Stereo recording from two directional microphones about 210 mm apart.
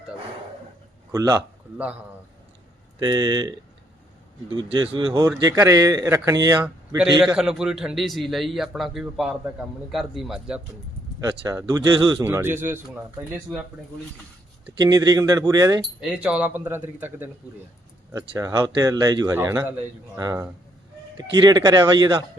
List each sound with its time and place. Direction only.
1.1 s speech: 15° right (ahead or behind)
3.0 s speech: 20° right (ahead or behind)
4.5 s a man's voice: 25° right (ahead or behind); by 10.6 s 5° right (ahead or behind)
11.2 s speech: 15° right (ahead or behind)
12.2 s speech: 10° right (ahead or behind)
14.8 s speech: 15° right (ahead or behind)
16.0 s speech: 5° right (ahead or behind); by 22.2 s 20° right (ahead or behind)